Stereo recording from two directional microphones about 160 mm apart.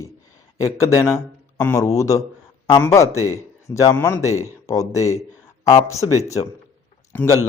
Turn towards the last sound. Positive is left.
turn(degrees=15)  # may be behind; listen again after turning